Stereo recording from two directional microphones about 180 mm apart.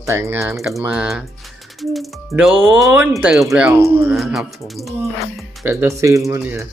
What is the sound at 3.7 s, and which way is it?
Speech, 15° right (ahead or behind).